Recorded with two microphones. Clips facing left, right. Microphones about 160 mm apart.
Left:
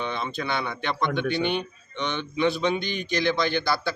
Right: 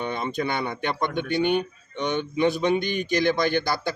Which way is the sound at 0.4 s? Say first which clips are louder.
Right 2 dB; 45° right (ahead or behind).